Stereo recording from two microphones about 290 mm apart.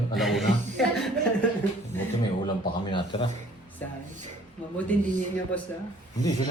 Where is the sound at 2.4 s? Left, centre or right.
Centre.